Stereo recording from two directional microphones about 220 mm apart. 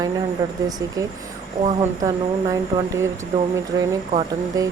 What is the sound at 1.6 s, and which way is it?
Speech, 20° right (ahead or behind).